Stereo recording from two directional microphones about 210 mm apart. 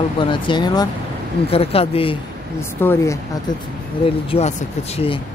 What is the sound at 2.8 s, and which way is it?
Speech, 10° left (ahead or behind).